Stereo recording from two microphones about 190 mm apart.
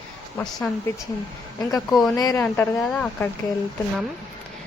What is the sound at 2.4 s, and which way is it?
Speech, 5° left (ahead or behind).